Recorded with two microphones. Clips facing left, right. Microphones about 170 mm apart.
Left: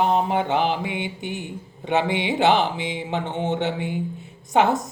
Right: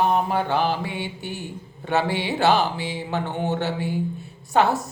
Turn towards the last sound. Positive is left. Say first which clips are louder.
# left 1 dB
turn(degrees=20)  # may be behind; listen again after turning